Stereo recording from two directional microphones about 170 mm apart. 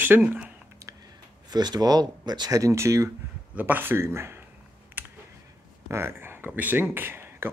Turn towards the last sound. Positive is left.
turn(degrees=-15)  # may be behind; listen again after turning